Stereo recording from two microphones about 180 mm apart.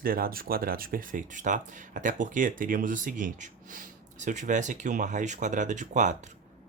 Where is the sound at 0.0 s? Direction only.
55° right (ahead or behind).